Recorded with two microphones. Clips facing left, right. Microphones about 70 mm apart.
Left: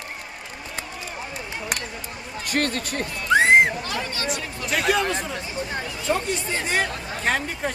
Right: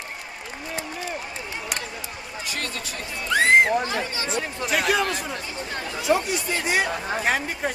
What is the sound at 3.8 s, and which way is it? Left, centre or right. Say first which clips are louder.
Speech: even; right.